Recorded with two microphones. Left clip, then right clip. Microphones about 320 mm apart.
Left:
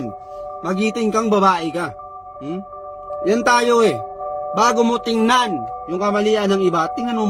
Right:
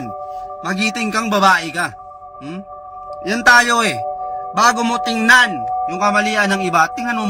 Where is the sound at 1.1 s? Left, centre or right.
Centre.